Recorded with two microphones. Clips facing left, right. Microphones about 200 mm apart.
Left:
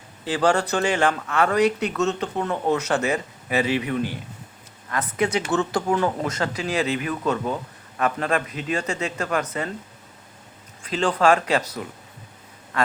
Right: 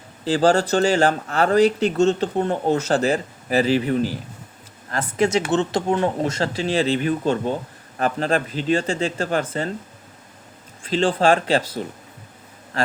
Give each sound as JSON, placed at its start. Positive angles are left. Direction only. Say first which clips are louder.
{"t": 0.3, "sound": "speech", "louder": "right 4 dB", "side_deg": -35}
{"t": 10.8, "sound": "speech", "louder": "right 2 dB", "side_deg": -30}